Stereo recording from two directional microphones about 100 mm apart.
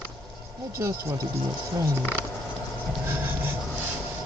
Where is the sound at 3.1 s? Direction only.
20° right (ahead or behind).